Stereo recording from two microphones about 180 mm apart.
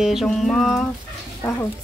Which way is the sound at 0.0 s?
Centre (ahead or behind).